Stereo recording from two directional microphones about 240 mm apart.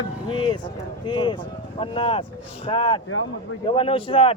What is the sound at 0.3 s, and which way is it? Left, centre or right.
Speech, left.